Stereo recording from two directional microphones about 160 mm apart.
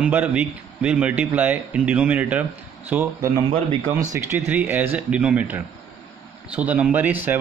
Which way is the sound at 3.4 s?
35° right (ahead or behind).